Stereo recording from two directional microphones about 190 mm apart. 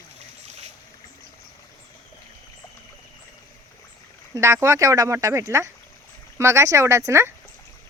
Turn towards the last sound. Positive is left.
turn(degrees=-15)  # may be behind; listen again after turning